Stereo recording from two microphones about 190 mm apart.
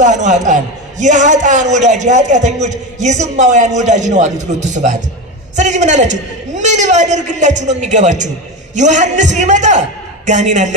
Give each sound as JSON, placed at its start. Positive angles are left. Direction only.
{"t": 0.0, "sound": "a man's voice", "side_deg": -40}
{"t": 5.6, "sound": "a man's voice", "side_deg": -40}